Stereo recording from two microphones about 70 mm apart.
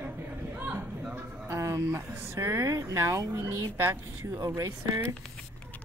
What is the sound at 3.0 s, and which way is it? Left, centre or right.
Speech, right.